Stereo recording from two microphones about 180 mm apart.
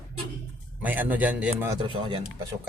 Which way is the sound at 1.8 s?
30° right (ahead or behind).